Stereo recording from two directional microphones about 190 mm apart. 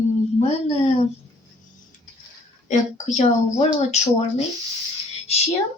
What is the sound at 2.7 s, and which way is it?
A woman's voice, 40° left (ahead or behind).